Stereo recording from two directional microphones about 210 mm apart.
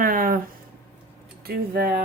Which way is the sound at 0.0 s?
40° right (ahead or behind).